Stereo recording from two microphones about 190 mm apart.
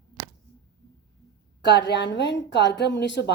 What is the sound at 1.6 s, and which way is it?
A woman's voice, 65° left (ahead or behind).